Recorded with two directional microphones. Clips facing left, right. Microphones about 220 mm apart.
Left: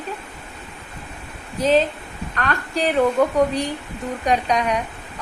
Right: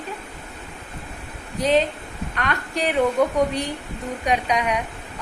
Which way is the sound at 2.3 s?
10° right (ahead or behind).